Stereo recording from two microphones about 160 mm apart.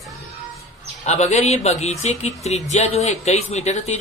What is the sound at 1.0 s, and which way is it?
A man's voice, 45° left (ahead or behind).